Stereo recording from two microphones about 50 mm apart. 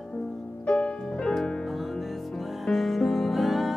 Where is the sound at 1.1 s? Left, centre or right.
Centre.